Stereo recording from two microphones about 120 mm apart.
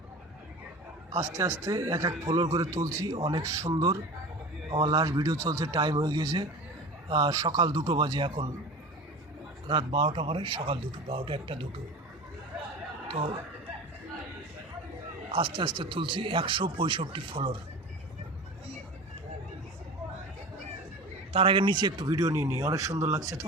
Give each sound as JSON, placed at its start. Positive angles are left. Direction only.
{"t": 1.4, "sound": "speech", "side_deg": -25}
{"t": 9.6, "sound": "speech", "side_deg": -45}
{"t": 13.1, "sound": "speech", "side_deg": -50}
{"t": 15.3, "sound": "speech", "side_deg": -45}
{"t": 21.3, "sound": "speech", "side_deg": -50}